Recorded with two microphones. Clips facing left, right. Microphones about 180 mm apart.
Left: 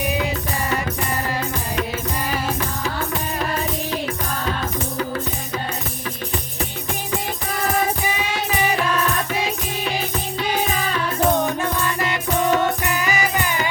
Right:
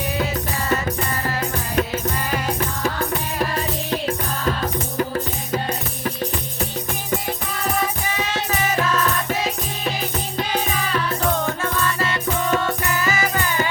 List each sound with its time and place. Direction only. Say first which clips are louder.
11.3 s music: left 2 dB; 15° left (ahead or behind)